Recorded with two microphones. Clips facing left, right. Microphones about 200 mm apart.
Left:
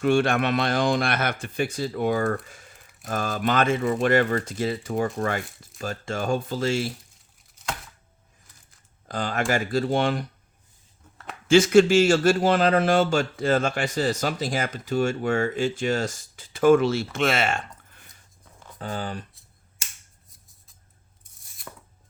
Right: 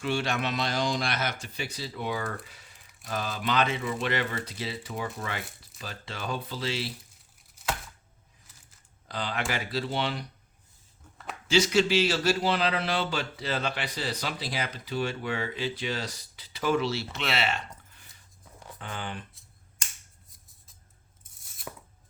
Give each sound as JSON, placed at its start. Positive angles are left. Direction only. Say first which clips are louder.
{"t": 0.0, "sound": "a man's voice", "louder": "left 8 dB", "side_deg": 55}
{"t": 9.0, "sound": "a man's voice", "louder": "left 6 dB", "side_deg": 45}
{"t": 11.4, "sound": "a man's voice", "louder": "left 8 dB", "side_deg": 50}
{"t": 20.3, "sound": "music", "louder": "left 1 dB", "side_deg": 0}
{"t": 21.4, "sound": "chopping", "louder": "even", "side_deg": 0}